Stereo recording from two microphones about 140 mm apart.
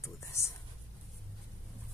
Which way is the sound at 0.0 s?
20° left (ahead or behind).